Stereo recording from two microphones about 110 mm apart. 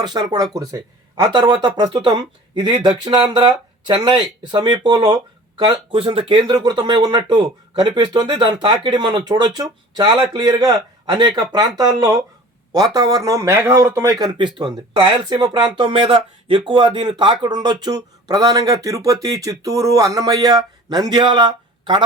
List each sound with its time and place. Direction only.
0.0 s speech: 40° right (ahead or behind)
14.3 s speech: 45° right (ahead or behind)